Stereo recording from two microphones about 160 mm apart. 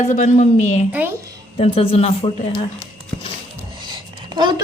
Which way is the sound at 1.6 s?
35° left (ahead or behind).